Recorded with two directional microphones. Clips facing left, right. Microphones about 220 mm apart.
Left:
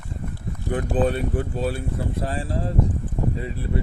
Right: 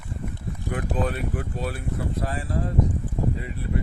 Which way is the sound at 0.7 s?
30° left (ahead or behind).